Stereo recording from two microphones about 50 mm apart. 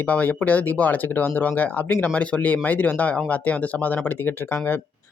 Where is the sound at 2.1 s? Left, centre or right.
Left.